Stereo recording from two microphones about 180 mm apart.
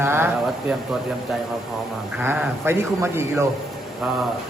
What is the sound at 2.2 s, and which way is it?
Speech, 10° right (ahead or behind).